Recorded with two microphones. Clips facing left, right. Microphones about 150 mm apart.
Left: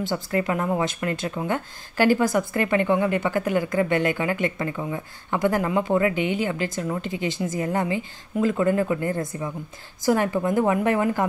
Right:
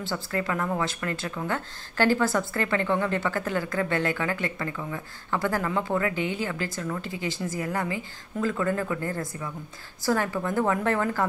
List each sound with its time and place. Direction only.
0.0 s a woman's voice: 20° left (ahead or behind)